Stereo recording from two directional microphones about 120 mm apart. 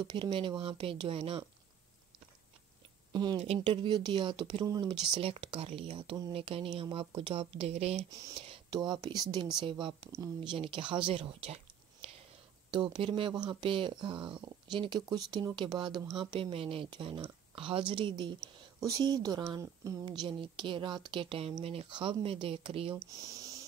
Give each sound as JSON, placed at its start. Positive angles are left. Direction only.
{"t": 0.0, "sound": "speech", "side_deg": -40}
{"t": 3.1, "sound": "a woman's voice", "side_deg": -35}
{"t": 5.1, "sound": "speech", "side_deg": -50}
{"t": 8.1, "sound": "a woman's voice", "side_deg": -30}
{"t": 8.4, "sound": "a sound", "side_deg": -55}
{"t": 8.7, "sound": "a woman's voice", "side_deg": -35}
{"t": 20.1, "sound": "speech", "side_deg": -45}
{"t": 23.2, "sound": "music", "side_deg": -30}